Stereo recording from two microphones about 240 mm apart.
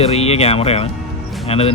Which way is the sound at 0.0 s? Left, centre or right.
Left.